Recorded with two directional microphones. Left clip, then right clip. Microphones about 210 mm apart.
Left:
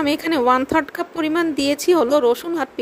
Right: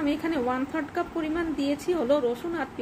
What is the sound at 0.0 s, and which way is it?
Speech, 55° left (ahead or behind).